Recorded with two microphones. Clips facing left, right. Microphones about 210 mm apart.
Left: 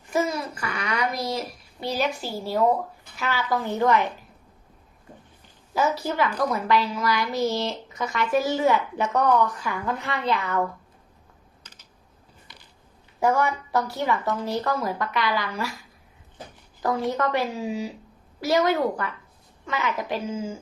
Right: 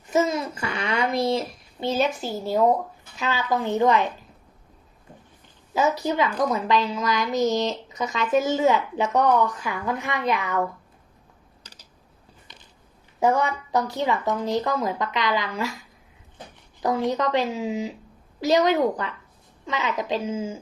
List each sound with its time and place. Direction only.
0.1 s babbling: 20° right (ahead or behind)
1.1 s a woman's voice: 25° right (ahead or behind)
5.7 s a woman's voice: 20° right (ahead or behind)
11.6 s typing: 35° right (ahead or behind)
13.1 s a woman's voice: 20° right (ahead or behind)
16.8 s a woman's voice: 15° right (ahead or behind)